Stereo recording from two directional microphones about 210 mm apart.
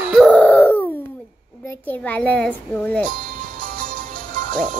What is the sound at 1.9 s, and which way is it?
A child's voice, 10° left (ahead or behind).